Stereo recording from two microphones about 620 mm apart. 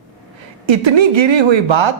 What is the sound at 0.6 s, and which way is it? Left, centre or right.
Speech, right.